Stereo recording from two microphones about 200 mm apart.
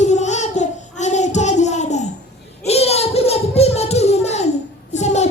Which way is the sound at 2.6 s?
30° left (ahead or behind).